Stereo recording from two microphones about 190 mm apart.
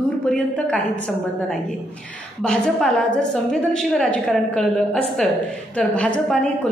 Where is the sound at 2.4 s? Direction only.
5° left (ahead or behind).